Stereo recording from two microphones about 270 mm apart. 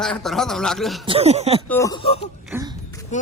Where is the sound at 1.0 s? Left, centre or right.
Right.